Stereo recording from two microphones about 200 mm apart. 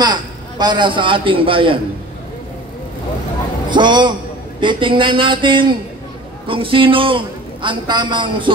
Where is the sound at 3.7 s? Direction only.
20° right (ahead or behind).